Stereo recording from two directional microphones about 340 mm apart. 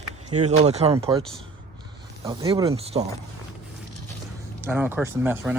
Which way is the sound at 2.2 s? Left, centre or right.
Centre.